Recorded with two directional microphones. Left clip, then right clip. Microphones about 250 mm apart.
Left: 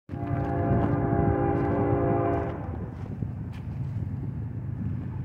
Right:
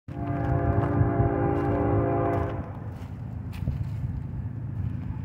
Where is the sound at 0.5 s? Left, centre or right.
Right.